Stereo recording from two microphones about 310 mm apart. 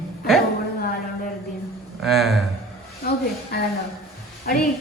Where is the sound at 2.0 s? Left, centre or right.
Centre.